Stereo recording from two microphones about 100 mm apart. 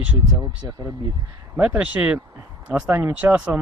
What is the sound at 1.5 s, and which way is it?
Speech, 15° right (ahead or behind).